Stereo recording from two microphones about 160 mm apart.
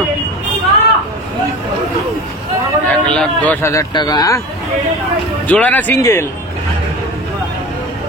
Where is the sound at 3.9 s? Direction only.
25° left (ahead or behind).